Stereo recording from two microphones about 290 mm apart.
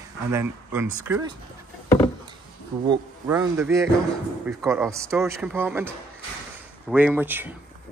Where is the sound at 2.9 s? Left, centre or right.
Centre.